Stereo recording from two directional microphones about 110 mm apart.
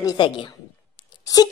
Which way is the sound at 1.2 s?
35° left (ahead or behind).